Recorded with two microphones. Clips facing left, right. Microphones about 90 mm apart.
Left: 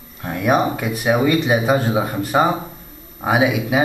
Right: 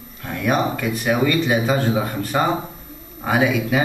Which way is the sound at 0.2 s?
15° left (ahead or behind).